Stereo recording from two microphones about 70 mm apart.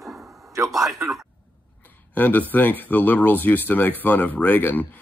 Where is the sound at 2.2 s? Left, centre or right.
Left.